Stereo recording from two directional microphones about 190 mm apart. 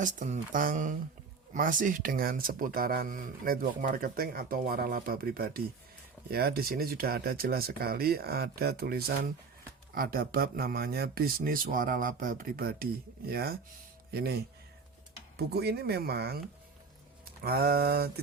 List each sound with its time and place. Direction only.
0.0 s speech: 40° right (ahead or behind); by 16.4 s 55° right (ahead or behind)
17.4 s speech: 55° right (ahead or behind)